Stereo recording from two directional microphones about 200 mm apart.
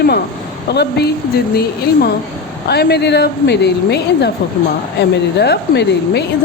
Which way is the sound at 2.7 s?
55° left (ahead or behind).